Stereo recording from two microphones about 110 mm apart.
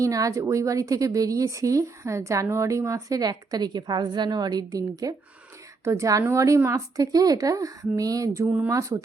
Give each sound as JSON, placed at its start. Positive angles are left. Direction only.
{"t": 0.0, "sound": "a woman's voice", "side_deg": -30}
{"t": 8.4, "sound": "speech", "side_deg": -10}
{"t": 8.7, "sound": "speech", "side_deg": -30}